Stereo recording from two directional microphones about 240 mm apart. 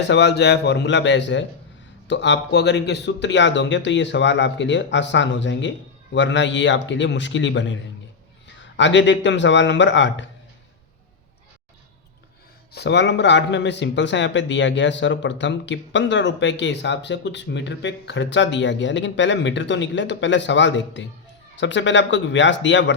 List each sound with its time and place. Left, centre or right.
0.1 s speech: left
12.7 s speech: left